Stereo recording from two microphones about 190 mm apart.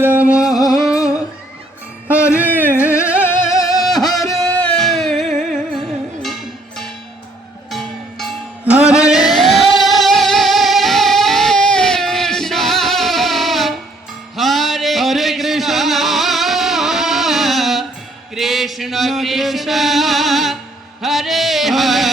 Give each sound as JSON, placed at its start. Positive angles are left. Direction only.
{"t": 0.0, "sound": "music", "side_deg": -10}
{"t": 2.3, "sound": "music", "side_deg": -10}
{"t": 2.8, "sound": "music", "side_deg": 15}
{"t": 4.0, "sound": "a sound", "side_deg": 20}
{"t": 4.3, "sound": "music", "side_deg": 5}
{"t": 6.2, "sound": "music", "side_deg": 0}
{"t": 18.3, "sound": "chant", "side_deg": 0}
{"t": 21.0, "sound": "music", "side_deg": 0}